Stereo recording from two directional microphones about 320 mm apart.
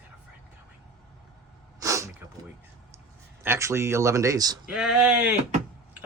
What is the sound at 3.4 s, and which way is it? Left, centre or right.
Speech, centre.